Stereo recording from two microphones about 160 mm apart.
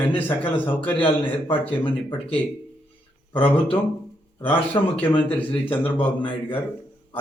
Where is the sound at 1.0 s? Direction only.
35° left (ahead or behind).